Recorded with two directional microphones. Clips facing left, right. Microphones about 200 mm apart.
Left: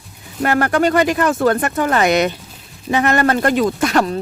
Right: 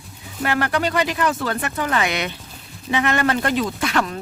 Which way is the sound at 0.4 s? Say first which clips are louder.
Left 6 dB; 45° left (ahead or behind).